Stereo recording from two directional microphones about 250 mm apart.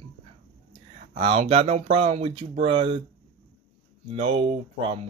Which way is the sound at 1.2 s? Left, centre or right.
Right.